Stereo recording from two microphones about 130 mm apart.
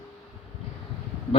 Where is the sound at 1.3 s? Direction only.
45° left (ahead or behind).